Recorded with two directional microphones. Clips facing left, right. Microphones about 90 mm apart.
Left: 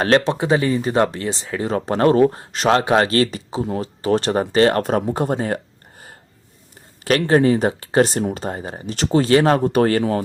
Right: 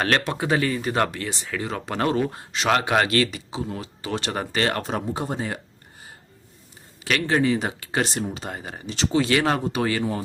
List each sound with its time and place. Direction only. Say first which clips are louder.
0.0 s speech: left 6 dB; 30° left (ahead or behind)
4.8 s speech: left 8 dB; 50° left (ahead or behind)
7.0 s speech: left 6 dB; 40° left (ahead or behind)
9.6 s speech: left 8 dB; 50° left (ahead or behind)
10.0 s speech: left 6 dB; 75° left (ahead or behind)